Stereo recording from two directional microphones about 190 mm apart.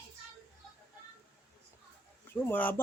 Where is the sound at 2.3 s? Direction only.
10° left (ahead or behind).